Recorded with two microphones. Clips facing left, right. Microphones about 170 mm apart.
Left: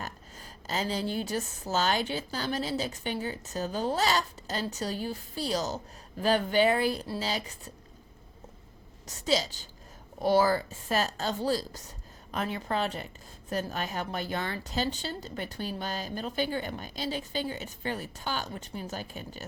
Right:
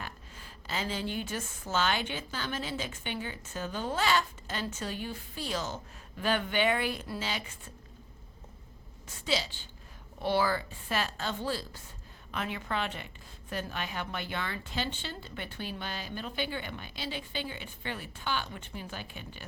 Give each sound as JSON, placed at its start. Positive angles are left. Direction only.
{"t": 0.0, "sound": "a woman's voice", "side_deg": 40}
{"t": 9.0, "sound": "a woman's voice", "side_deg": 40}